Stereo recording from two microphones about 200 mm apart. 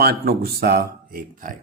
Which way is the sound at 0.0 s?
50° right (ahead or behind).